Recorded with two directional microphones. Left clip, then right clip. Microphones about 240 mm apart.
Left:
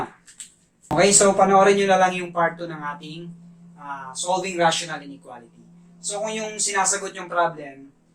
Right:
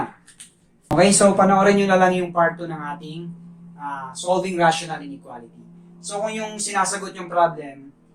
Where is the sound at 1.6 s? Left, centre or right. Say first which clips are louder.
Right 1 dB; left.